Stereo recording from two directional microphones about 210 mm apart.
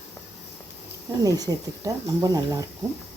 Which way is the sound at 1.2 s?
15° right (ahead or behind).